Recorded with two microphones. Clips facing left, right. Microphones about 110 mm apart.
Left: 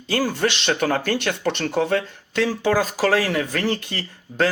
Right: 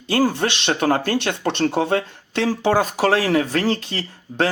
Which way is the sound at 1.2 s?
25° right (ahead or behind).